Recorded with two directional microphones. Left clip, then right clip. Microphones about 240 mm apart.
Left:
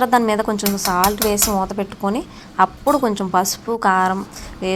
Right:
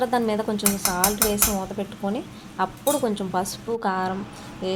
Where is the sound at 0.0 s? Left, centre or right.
Centre.